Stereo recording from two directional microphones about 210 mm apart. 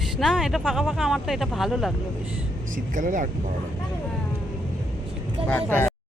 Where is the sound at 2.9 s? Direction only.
40° right (ahead or behind).